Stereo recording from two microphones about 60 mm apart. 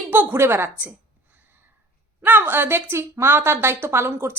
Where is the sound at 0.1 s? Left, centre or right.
Right.